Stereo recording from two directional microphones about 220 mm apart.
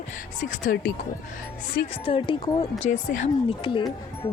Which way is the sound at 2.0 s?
25° left (ahead or behind).